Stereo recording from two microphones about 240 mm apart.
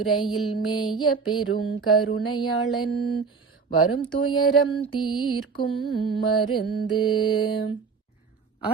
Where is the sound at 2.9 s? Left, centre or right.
Left.